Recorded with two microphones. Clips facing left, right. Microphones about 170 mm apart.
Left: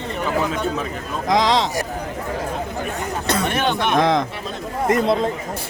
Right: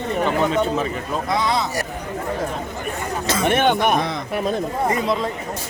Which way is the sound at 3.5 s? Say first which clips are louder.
Right 3 dB; 50° right (ahead or behind).